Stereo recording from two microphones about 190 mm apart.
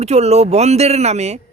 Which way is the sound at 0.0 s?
35° right (ahead or behind).